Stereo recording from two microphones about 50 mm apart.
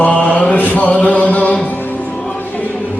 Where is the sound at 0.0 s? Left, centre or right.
Left.